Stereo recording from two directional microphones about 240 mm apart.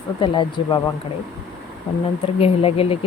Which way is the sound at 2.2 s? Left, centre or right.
Left.